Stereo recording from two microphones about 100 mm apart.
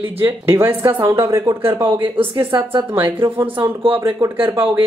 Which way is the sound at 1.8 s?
55° right (ahead or behind).